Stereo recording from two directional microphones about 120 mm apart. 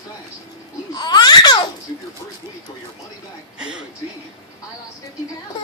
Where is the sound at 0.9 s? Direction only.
35° left (ahead or behind).